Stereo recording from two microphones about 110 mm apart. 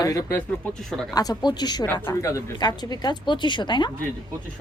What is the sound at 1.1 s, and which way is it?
A woman's voice, 40° left (ahead or behind).